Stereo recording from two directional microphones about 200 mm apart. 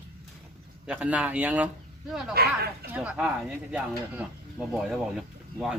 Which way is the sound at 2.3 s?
50° right (ahead or behind).